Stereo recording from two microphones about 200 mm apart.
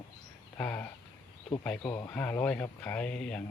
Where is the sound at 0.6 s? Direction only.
5° left (ahead or behind).